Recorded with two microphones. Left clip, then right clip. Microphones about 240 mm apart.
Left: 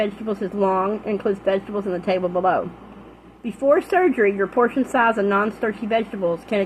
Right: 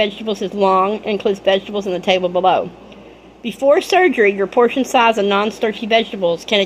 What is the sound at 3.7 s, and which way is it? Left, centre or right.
A woman's voice, right.